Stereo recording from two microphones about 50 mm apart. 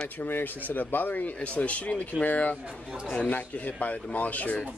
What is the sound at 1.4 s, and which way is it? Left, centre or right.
Speech, left.